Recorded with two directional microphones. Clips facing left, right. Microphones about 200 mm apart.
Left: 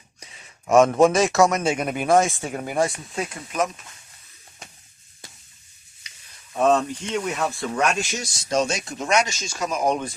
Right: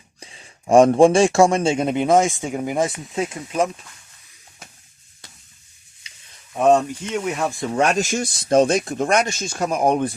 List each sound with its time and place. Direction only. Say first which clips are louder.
0.2 s a man's voice: right 4 dB; 30° right (ahead or behind)
6.6 s speech: right 3 dB; 15° right (ahead or behind)
7.8 s speech: right 5 dB; 35° right (ahead or behind); by 10.2 s 55° right (ahead or behind)